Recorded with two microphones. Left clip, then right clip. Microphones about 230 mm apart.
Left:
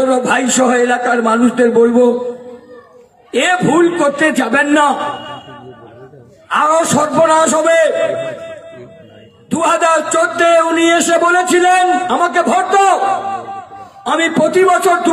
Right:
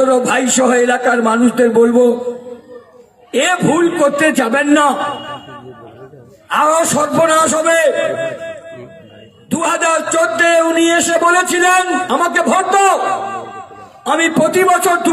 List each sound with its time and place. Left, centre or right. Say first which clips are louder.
0.1 s a man's voice: even; right
3.4 s a man's voice: left 2 dB; right
7.9 s a sound: left 1 dB; right
9.5 s a man's voice: left 2 dB; right